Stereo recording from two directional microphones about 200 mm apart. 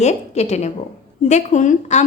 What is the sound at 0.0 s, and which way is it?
A woman's voice, 35° left (ahead or behind).